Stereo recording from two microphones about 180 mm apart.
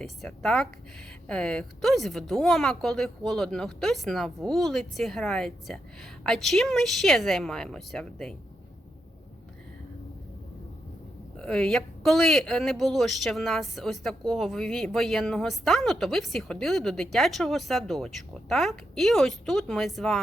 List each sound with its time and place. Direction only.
0.0 s speech: 5° left (ahead or behind)
11.3 s speech: 5° left (ahead or behind)